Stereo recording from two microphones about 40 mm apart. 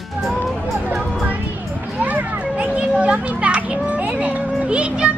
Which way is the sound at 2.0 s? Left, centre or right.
Right.